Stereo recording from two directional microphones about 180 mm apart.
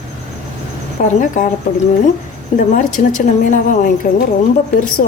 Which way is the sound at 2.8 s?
45° left (ahead or behind).